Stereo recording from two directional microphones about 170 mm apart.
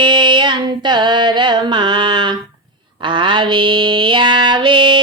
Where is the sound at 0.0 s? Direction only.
30° right (ahead or behind).